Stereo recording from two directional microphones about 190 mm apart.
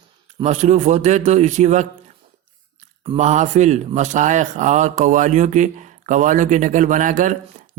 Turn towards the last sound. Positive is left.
turn(degrees=-45)  # may be behind; listen again after turning